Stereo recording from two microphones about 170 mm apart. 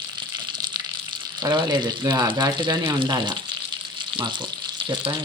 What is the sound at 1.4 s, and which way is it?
Speech, 25° right (ahead or behind).